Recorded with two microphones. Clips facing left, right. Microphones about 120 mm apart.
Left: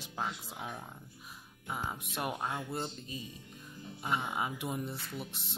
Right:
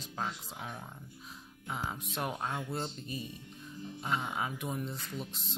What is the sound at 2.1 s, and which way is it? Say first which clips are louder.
Speech: even; 10° left (ahead or behind).